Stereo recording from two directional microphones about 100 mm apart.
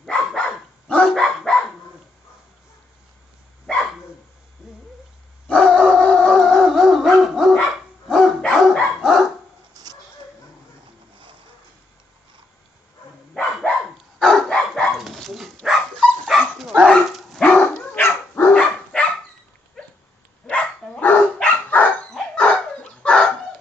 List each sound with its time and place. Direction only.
0.0 s dog: 5° left (ahead or behind)
1.2 s dog: centre (ahead or behind)
3.7 s dog: centre (ahead or behind)
4.6 s cat: 5° right (ahead or behind)
5.5 s howl: 10° left (ahead or behind)
8.1 s dog: centre (ahead or behind)
13.3 s dog: 5° left (ahead or behind)
17.9 s dog: 20° left (ahead or behind)
18.5 s dog: 10° left (ahead or behind)